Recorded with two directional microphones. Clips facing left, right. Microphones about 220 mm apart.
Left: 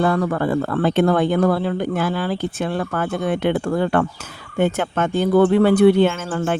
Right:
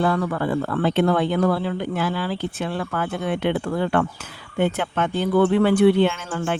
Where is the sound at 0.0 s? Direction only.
45° left (ahead or behind).